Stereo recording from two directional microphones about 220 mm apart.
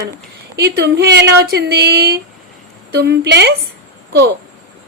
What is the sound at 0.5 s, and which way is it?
A woman's voice, 50° right (ahead or behind).